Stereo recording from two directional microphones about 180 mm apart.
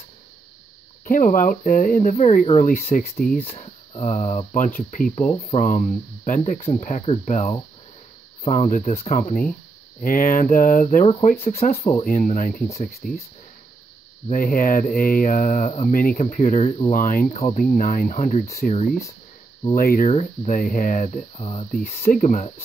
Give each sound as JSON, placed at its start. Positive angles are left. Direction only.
{"t": 1.0, "sound": "speech", "side_deg": 50}
{"t": 3.3, "sound": "speech", "side_deg": 35}
{"t": 14.3, "sound": "speech", "side_deg": 50}
{"t": 19.7, "sound": "speech", "side_deg": 50}
{"t": 20.1, "sound": "speech", "side_deg": 40}
{"t": 21.7, "sound": "speech", "side_deg": 50}